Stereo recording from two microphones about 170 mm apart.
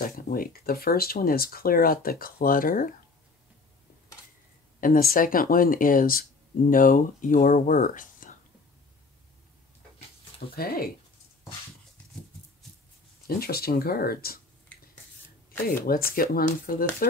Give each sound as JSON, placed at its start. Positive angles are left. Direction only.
{"t": 0.0, "sound": "speech", "side_deg": 60}
{"t": 4.7, "sound": "speech", "side_deg": 55}
{"t": 10.5, "sound": "speech", "side_deg": 60}
{"t": 13.3, "sound": "speech", "side_deg": 65}
{"t": 15.6, "sound": "speech", "side_deg": 60}